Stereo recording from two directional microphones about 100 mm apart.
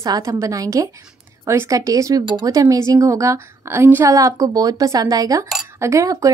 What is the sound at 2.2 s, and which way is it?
Speech, 45° right (ahead or behind).